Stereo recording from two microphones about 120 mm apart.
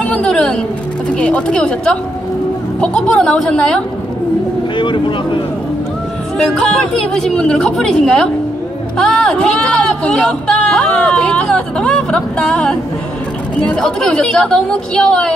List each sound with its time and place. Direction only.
0.0 s a sound: 10° left (ahead or behind)
1.1 s speech: 10° left (ahead or behind)
4.7 s speech: 40° left (ahead or behind)
6.3 s a woman's voice: 5° left (ahead or behind)